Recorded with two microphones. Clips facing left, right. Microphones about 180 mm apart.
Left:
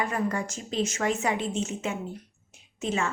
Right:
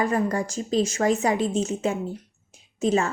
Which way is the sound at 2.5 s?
40° right (ahead or behind).